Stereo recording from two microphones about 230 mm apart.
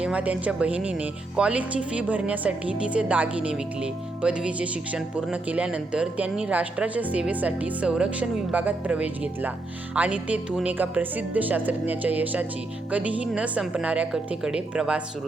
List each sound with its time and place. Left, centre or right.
0.0 s speech: centre